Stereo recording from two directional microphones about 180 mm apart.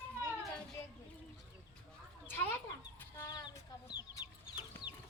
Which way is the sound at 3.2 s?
20° left (ahead or behind).